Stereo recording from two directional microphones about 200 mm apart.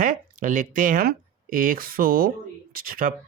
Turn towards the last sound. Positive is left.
turn(degrees=-45)  # may be behind; listen again after turning